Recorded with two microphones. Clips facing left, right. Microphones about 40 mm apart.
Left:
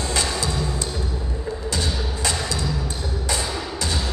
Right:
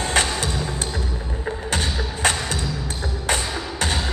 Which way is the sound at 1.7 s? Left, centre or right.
Right.